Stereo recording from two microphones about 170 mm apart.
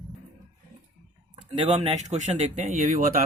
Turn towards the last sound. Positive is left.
turn(degrees=-40)  # may be behind; listen again after turning